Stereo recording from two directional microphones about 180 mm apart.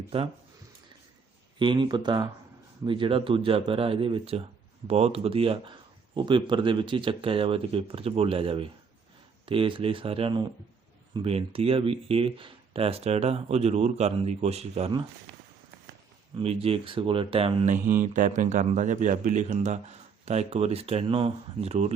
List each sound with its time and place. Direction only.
1.5 s speech: 25° right (ahead or behind)
16.4 s speech: 30° right (ahead or behind)
18.1 s speech: 45° right (ahead or behind)